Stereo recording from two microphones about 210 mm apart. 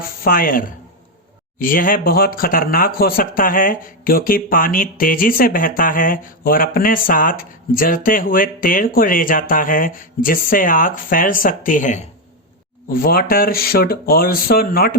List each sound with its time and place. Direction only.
0.3 s speech: 45° left (ahead or behind)